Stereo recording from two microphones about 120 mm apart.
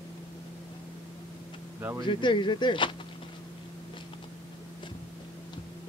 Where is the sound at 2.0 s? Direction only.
40° left (ahead or behind).